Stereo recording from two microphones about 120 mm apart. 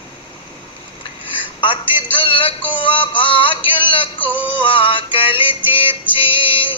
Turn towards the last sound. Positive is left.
turn(degrees=45)  # may be behind; listen again after turning